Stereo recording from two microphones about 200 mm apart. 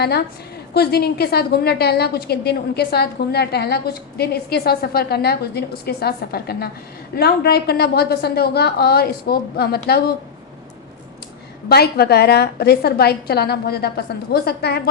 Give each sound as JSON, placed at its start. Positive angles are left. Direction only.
{"t": 0.7, "sound": "a woman's voice", "side_deg": 50}
{"t": 11.7, "sound": "a woman's voice", "side_deg": 50}